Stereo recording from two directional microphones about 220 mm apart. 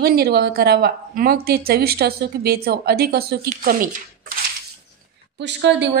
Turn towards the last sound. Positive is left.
turn(degrees=-50)  # may be behind; listen again after turning